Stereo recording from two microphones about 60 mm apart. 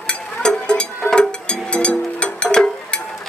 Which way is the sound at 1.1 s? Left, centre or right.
Centre.